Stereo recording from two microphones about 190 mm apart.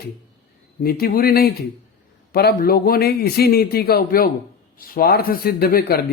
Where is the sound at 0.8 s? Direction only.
50° left (ahead or behind).